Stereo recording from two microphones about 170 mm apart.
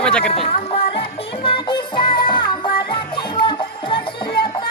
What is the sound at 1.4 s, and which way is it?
Music, 30° left (ahead or behind).